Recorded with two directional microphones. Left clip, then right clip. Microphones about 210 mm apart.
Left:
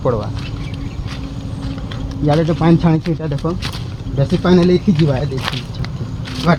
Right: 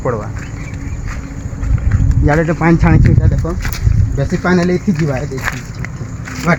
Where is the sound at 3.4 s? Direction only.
15° left (ahead or behind).